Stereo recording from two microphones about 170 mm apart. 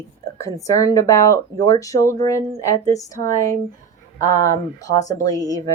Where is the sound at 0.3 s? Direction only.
20° left (ahead or behind).